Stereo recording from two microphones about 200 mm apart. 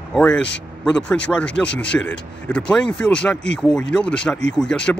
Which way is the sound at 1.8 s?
65° left (ahead or behind).